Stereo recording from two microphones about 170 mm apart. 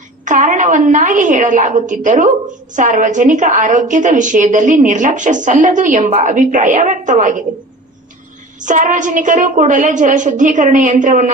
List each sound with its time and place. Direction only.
0.3 s a woman's voice: 50° right (ahead or behind)
8.6 s a woman's voice: 45° right (ahead or behind)